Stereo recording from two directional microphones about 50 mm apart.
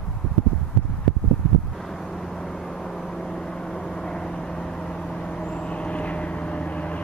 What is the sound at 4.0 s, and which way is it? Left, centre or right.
Vehicle, centre.